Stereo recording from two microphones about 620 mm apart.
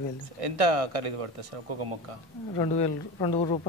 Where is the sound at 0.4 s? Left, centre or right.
Right.